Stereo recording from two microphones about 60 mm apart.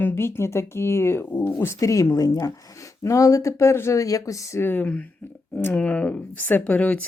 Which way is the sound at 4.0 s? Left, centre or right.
Left.